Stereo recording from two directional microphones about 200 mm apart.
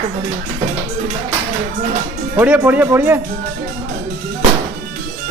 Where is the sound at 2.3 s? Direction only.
10° right (ahead or behind).